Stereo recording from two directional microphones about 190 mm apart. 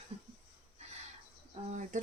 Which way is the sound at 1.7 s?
40° right (ahead or behind).